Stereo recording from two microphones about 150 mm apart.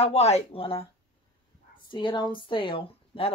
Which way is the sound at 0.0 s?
45° left (ahead or behind).